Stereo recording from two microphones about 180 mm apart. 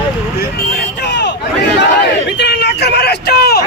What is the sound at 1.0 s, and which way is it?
Crowd, 70° left (ahead or behind).